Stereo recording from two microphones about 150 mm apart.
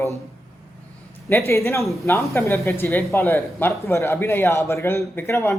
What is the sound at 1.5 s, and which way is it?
Speech, 20° left (ahead or behind).